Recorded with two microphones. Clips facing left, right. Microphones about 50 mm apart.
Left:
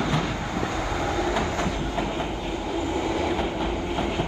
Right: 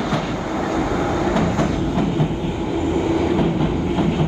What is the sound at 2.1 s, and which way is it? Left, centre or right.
Train, centre.